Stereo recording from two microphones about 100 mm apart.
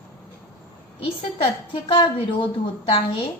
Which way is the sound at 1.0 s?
65° left (ahead or behind).